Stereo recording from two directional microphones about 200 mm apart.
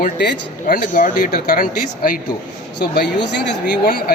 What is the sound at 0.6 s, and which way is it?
A man's voice, 45° left (ahead or behind).